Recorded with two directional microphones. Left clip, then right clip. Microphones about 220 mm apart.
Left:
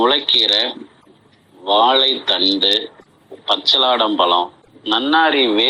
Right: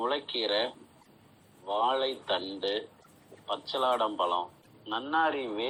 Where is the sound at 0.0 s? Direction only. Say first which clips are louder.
Left 17 dB; 35° left (ahead or behind).